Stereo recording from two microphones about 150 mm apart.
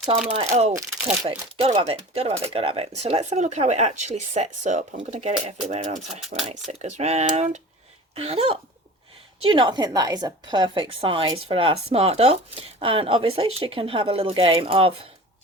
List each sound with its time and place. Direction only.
0.3 s a woman's voice: 45° right (ahead or behind)
6.1 s speech: centre (ahead or behind)
6.7 s a woman's voice: 45° right (ahead or behind)